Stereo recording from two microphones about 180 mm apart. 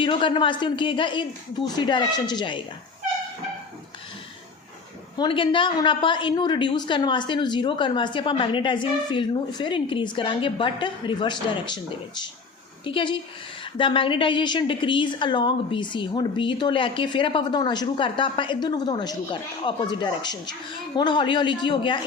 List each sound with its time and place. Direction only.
0.0 s a woman's voice: 30° left (ahead or behind)
5.1 s a woman's voice: 25° left (ahead or behind)